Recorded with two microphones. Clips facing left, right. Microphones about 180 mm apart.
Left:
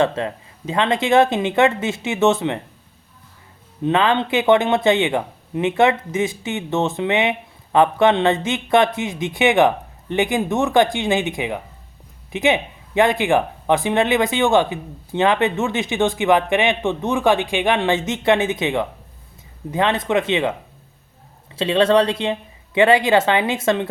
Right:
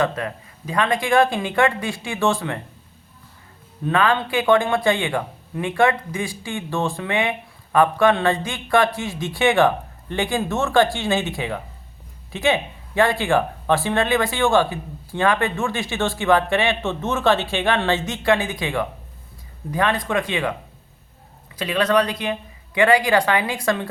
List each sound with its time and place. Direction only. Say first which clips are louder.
0.0 s speech: left 3 dB; 25° left (ahead or behind)
3.8 s speech: left 2 dB; 20° left (ahead or behind)
21.5 s speech: left 4 dB; 25° left (ahead or behind)